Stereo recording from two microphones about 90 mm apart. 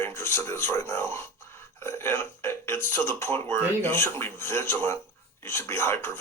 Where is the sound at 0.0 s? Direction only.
30° left (ahead or behind).